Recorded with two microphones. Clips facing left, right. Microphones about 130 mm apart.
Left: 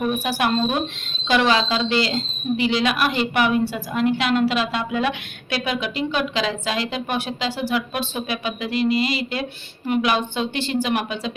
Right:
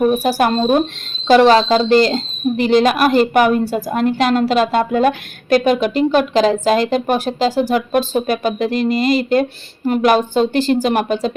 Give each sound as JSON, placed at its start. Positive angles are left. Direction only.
{"t": 0.0, "sound": "speech", "side_deg": -40}